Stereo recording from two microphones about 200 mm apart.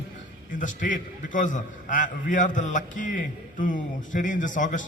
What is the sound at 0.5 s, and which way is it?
A man's voice, 40° left (ahead or behind).